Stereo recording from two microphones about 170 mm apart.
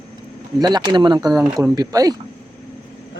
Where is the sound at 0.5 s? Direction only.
25° right (ahead or behind).